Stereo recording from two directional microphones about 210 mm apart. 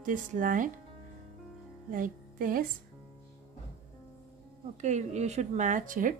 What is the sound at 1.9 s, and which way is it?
Music, 40° right (ahead or behind).